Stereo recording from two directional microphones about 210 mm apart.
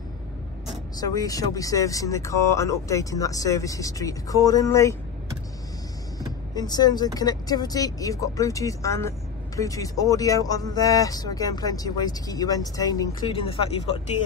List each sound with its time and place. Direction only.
0.9 s speech: 15° left (ahead or behind)
6.5 s speech: 20° left (ahead or behind)